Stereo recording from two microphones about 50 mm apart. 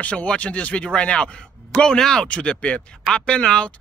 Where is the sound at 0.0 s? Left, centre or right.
Left.